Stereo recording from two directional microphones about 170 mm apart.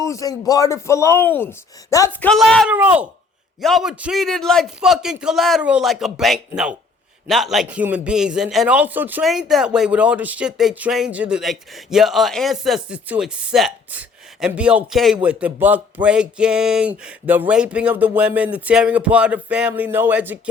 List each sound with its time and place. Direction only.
0.0 s speech: 20° left (ahead or behind)
2.2 s a man's voice: 5° left (ahead or behind)
2.6 s a man's voice: 10° right (ahead or behind)